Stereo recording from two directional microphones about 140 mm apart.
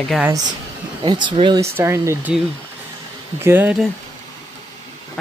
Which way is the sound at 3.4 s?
15° right (ahead or behind).